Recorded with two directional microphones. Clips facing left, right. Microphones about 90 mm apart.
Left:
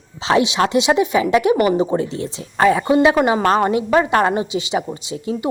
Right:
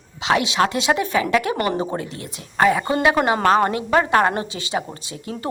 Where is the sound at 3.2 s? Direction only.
15° left (ahead or behind).